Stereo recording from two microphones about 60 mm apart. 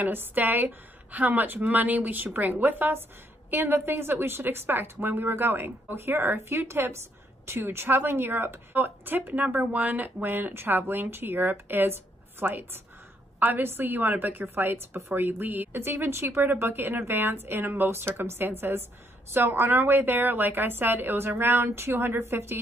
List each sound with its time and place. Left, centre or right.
0.0 s a woman's voice: right